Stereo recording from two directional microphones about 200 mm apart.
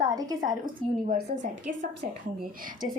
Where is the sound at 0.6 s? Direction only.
40° right (ahead or behind).